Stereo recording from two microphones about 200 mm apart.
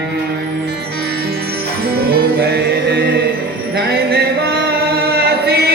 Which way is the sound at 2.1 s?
50° right (ahead or behind).